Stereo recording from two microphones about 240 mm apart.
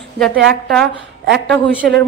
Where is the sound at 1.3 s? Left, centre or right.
Right.